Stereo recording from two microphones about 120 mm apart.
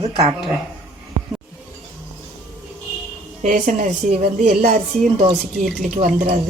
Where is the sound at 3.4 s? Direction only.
90° right.